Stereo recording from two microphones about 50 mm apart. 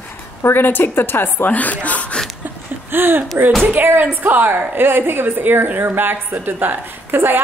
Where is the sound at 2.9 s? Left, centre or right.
Right.